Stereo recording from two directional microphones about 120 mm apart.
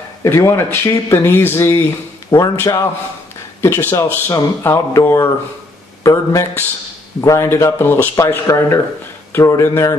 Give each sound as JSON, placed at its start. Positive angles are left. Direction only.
{"t": 0.2, "sound": "speech", "side_deg": 25}